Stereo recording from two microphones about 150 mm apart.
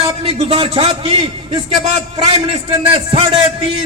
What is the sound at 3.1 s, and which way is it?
Speech, 40° right (ahead or behind).